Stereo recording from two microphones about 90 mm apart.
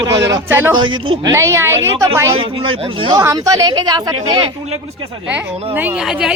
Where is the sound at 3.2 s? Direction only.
40° right (ahead or behind).